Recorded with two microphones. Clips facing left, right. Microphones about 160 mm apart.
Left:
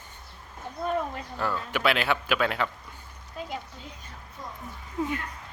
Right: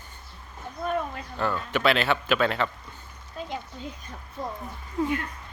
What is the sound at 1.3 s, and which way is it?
Speech, 10° left (ahead or behind).